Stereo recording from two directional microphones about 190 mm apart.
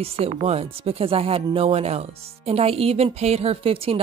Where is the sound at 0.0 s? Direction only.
30° right (ahead or behind).